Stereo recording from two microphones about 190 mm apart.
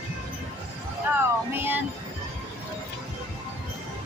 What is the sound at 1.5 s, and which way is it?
Child singing, 10° right (ahead or behind).